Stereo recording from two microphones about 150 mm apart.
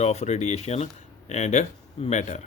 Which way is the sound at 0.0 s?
45° left (ahead or behind).